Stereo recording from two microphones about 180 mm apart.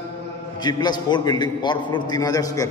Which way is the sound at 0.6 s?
25° left (ahead or behind).